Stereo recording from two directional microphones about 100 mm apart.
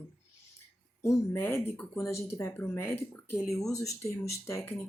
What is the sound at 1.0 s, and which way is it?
Speech, 25° left (ahead or behind).